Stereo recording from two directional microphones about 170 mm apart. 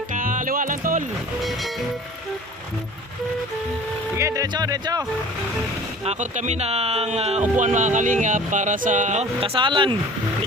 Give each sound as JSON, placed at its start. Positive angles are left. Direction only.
{"t": 0.1, "sound": "music", "side_deg": -50}
{"t": 4.1, "sound": "speech", "side_deg": -15}
{"t": 6.1, "sound": "speech", "side_deg": -45}
{"t": 9.6, "sound": "speech", "side_deg": -30}